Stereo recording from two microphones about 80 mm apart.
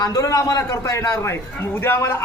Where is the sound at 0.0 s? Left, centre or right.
Left.